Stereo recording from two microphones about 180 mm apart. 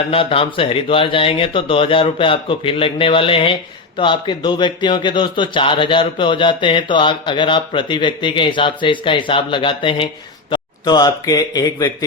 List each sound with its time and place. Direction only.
0.1 s speech: 30° left (ahead or behind)